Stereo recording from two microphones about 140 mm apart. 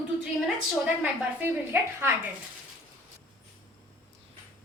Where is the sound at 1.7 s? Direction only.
15° right (ahead or behind).